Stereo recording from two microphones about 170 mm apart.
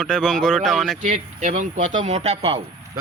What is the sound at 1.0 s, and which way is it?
Speech, 45° right (ahead or behind).